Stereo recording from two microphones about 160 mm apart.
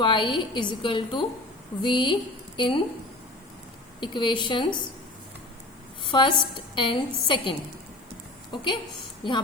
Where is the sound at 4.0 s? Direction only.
30° left (ahead or behind).